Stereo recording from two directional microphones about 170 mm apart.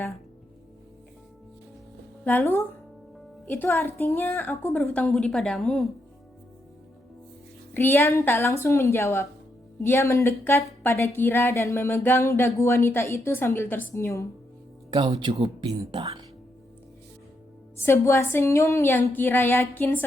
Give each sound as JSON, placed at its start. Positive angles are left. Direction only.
{"t": 2.2, "sound": "a woman's voice", "side_deg": 10}
{"t": 7.7, "sound": "speech", "side_deg": 10}
{"t": 14.8, "sound": "speech", "side_deg": -25}
{"t": 17.7, "sound": "speech", "side_deg": 15}